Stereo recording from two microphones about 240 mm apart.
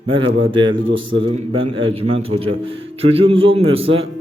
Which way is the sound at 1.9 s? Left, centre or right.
Right.